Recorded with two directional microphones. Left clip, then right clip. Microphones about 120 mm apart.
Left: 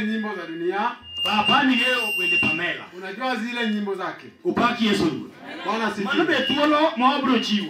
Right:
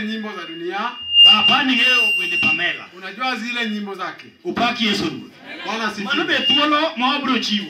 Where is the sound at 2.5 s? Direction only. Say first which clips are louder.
Right 5 dB; 30° right (ahead or behind).